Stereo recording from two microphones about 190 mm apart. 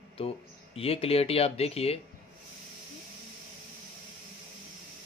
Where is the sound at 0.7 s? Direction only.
30° left (ahead or behind).